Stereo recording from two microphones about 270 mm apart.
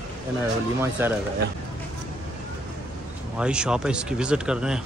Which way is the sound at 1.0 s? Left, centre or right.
Centre.